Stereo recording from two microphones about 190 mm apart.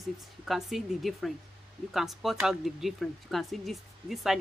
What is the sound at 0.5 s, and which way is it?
Speech, centre (ahead or behind).